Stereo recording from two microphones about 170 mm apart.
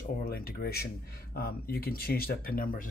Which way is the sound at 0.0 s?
60° left (ahead or behind).